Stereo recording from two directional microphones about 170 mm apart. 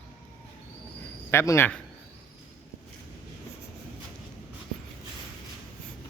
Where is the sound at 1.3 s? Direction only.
15° left (ahead or behind).